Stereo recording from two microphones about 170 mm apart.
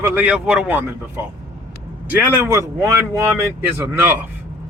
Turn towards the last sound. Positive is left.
turn(degrees=-10)  # may be behind; listen again after turning